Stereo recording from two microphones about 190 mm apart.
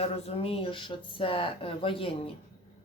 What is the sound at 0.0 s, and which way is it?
Speech, 30° left (ahead or behind).